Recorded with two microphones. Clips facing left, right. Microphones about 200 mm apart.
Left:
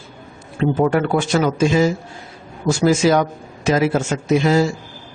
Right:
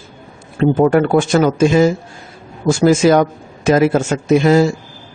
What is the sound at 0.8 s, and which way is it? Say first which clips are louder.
Speech: right 5 dB; 50° right (ahead or behind).